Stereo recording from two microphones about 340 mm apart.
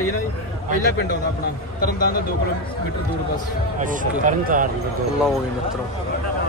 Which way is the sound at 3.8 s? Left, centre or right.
Right.